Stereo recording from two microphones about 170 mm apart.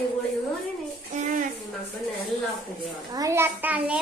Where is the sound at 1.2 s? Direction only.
45° right (ahead or behind).